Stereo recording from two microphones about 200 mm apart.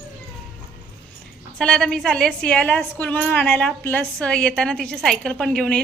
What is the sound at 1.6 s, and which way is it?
A woman's voice, 5° left (ahead or behind).